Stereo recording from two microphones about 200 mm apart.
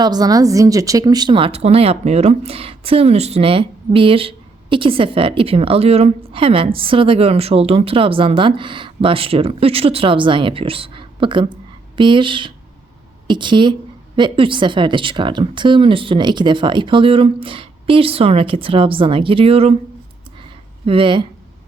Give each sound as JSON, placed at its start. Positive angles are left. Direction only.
{"t": 0.0, "sound": "speech", "side_deg": -20}
{"t": 20.8, "sound": "speech", "side_deg": -25}